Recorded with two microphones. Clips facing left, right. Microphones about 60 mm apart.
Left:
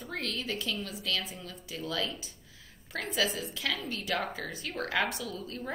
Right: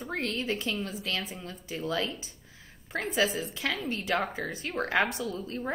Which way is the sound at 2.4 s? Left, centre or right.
Right.